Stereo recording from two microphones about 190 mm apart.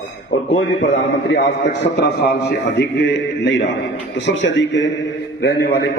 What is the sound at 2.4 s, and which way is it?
A man's voice, 60° left (ahead or behind).